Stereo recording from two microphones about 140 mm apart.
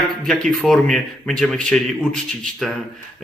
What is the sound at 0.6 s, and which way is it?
Speech, 5° left (ahead or behind).